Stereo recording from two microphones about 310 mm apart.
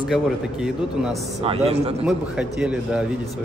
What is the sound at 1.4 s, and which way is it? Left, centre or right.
Speech, centre.